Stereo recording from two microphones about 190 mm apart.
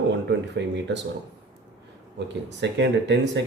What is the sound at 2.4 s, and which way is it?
Speech, 65° right (ahead or behind).